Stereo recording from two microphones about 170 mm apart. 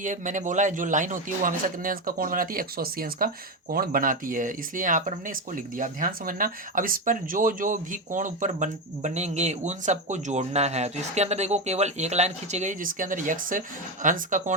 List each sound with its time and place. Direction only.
0.0 s speech: 50° right (ahead or behind)